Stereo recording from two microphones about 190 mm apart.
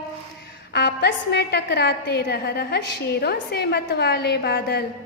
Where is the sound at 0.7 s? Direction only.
60° left (ahead or behind).